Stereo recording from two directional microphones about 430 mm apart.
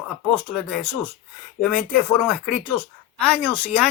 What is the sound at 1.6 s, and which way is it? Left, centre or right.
Speech, centre.